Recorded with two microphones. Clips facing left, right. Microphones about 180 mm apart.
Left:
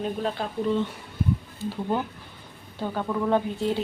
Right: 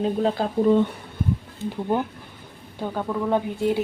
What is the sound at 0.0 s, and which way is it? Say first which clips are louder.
Speech: right 6 dB; 30° right (ahead or behind).